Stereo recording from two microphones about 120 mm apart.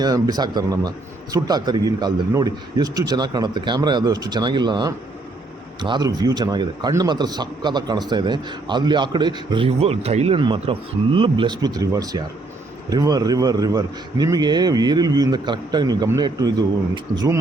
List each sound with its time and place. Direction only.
0.0 s speech: 35° right (ahead or behind)
9.6 s speech: 55° right (ahead or behind)
10.4 s speech: 45° right (ahead or behind); by 17.4 s 30° right (ahead or behind)